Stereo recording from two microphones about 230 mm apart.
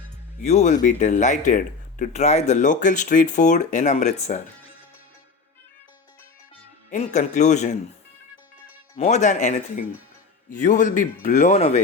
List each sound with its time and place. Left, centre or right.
0.4 s speech: left
6.9 s speech: left
9.0 s speech: left